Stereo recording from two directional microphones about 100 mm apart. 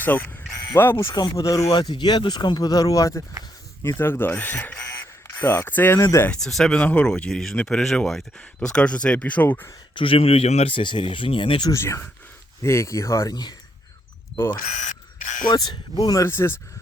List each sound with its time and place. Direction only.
0.0 s speech: 20° left (ahead or behind)
1.1 s speech: 45° left (ahead or behind)
1.7 s speech: 45° left (ahead or behind)
3.8 s speech: 25° left (ahead or behind)
5.4 s speech: 25° left (ahead or behind)
6.0 s speech: 30° left (ahead or behind)
6.3 s speech: 5° left (ahead or behind)
9.9 s speech: 65° left (ahead or behind)
11.7 s speech: 30° left (ahead or behind)
15.4 s speech: 45° left (ahead or behind)
16.2 s speech: 25° left (ahead or behind)